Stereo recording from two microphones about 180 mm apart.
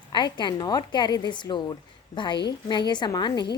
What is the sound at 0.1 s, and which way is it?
A woman's voice, 25° left (ahead or behind).